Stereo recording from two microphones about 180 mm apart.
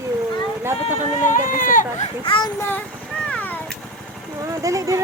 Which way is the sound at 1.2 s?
45° left (ahead or behind).